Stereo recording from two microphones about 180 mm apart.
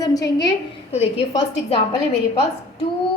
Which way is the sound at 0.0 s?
20° left (ahead or behind).